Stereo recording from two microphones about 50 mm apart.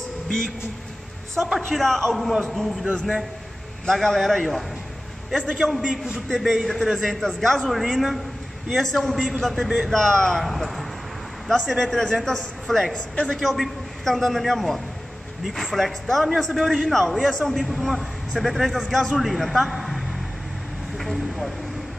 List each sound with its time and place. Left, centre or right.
1.4 s a man's voice: centre
5.7 s a man's voice: centre
13.1 s a woman's voice: centre
13.4 s a man's voice: centre
21.0 s speech: centre